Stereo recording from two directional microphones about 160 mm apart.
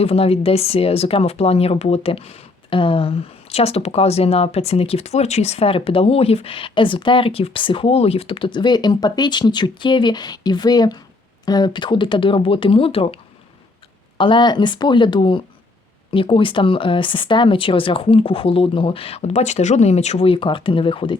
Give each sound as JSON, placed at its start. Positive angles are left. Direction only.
{"t": 0.0, "sound": "speech", "side_deg": 40}
{"t": 14.2, "sound": "speech", "side_deg": 30}